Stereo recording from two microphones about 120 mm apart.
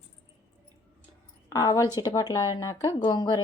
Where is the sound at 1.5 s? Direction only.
30° left (ahead or behind).